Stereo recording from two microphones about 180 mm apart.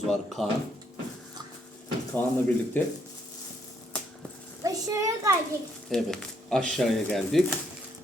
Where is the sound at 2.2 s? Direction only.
10° left (ahead or behind).